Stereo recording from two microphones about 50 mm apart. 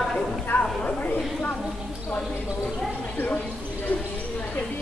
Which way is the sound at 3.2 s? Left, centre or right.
Left.